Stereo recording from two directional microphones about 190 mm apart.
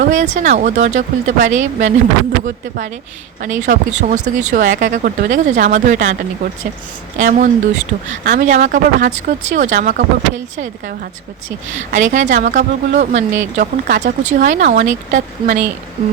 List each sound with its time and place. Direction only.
0.0 s speech: 40° right (ahead or behind)
3.4 s speech: 40° right (ahead or behind)
7.3 s speech: 40° right (ahead or behind)
11.9 s speech: 40° right (ahead or behind)
13.6 s speech: 50° right (ahead or behind)
14.0 s speech: 40° right (ahead or behind)